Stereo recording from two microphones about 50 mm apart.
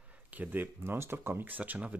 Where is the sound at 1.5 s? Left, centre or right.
Right.